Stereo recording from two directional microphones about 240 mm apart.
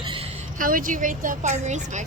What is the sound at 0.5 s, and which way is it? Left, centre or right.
A woman's voice, right.